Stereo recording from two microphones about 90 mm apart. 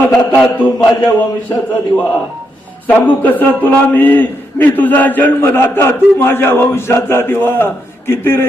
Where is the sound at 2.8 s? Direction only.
20° left (ahead or behind).